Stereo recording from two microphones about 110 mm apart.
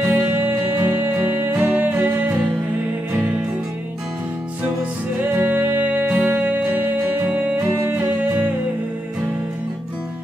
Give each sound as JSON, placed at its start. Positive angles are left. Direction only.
{"t": 0.1, "sound": "music", "side_deg": -15}
{"t": 5.3, "sound": "music", "side_deg": -15}